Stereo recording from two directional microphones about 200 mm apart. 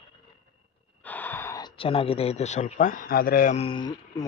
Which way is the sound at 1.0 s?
10° left (ahead or behind).